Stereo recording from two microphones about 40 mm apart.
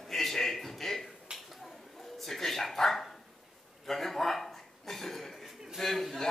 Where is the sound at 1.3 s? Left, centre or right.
Centre.